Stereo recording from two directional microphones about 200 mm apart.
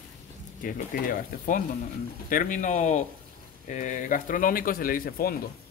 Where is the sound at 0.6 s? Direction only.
45° left (ahead or behind).